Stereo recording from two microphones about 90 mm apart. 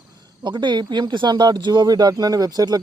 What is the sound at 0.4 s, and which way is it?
Speech, 60° right (ahead or behind).